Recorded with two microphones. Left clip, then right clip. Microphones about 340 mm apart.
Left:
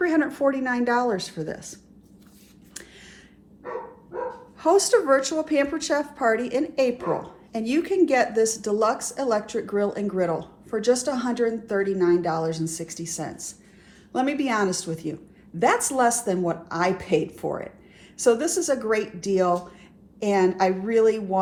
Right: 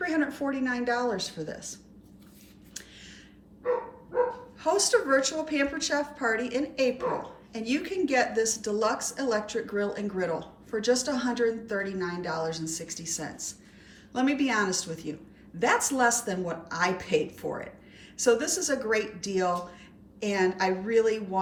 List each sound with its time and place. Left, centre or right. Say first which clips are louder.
0.0 s a woman's voice: left 7 dB; centre
4.6 s a woman's voice: left 6 dB; centre